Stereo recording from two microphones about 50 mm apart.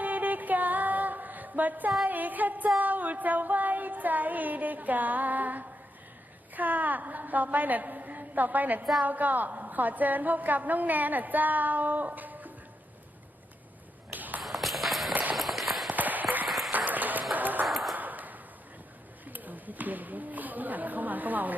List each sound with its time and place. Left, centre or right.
0.0 s female singing: right
2.0 s a woman's voice: right
14.1 s tap: right
14.4 s a sound: centre
15.1 s run: right
15.4 s run: centre
15.9 s a sound: right
16.5 s applause: centre
16.7 s a sound: right
17.7 s ping: centre
17.9 s ping: right
19.2 s speech: right